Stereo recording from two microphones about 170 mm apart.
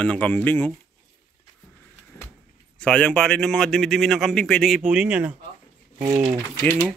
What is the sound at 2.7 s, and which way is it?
A man's voice, 5° left (ahead or behind).